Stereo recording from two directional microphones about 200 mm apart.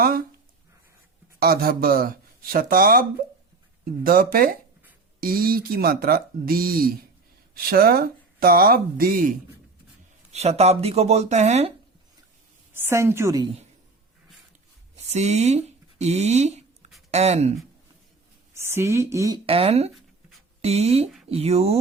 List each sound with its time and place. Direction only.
1.4 s speech: 50° right (ahead or behind)
10.3 s speech: 30° right (ahead or behind)
12.7 s speech: 10° right (ahead or behind)
15.1 s speech: 35° right (ahead or behind)
18.5 s speech: 15° right (ahead or behind)
19.5 s speech: 30° right (ahead or behind)